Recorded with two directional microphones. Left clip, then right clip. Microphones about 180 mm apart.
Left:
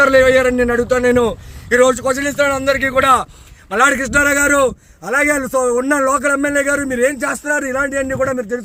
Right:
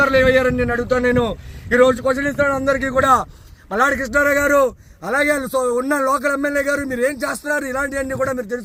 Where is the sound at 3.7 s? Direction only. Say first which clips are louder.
Left 4 dB; 10° left (ahead or behind).